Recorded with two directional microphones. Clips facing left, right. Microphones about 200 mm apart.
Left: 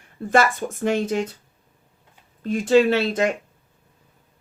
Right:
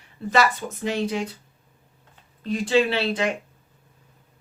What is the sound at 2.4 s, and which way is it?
Speech, 45° left (ahead or behind).